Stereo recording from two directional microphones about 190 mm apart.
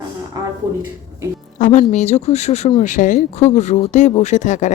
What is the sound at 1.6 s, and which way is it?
A woman's voice, 40° left (ahead or behind).